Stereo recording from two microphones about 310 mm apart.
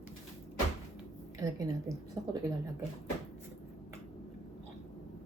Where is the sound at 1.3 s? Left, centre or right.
Centre.